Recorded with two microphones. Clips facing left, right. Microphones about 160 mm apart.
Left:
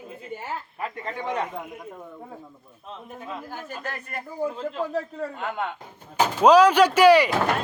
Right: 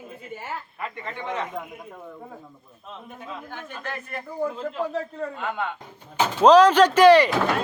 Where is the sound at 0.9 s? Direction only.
35° left (ahead or behind).